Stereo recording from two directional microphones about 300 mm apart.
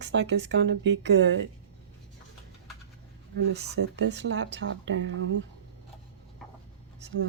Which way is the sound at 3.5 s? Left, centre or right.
Right.